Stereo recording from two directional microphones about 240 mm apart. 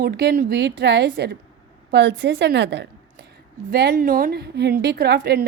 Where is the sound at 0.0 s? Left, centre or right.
Right.